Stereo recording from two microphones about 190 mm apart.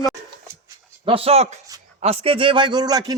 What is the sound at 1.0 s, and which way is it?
A man's voice, 30° right (ahead or behind).